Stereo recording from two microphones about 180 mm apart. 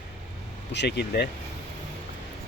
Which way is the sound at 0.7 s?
70° left (ahead or behind).